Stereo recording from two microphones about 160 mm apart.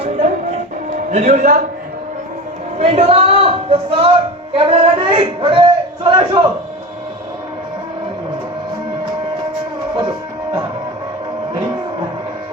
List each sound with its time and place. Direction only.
0.0 s music: 45° right (ahead or behind)
1.1 s a man's voice: 40° right (ahead or behind)
2.7 s a man's voice: 40° right (ahead or behind)